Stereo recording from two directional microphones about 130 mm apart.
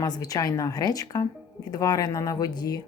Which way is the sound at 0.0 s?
30° left (ahead or behind).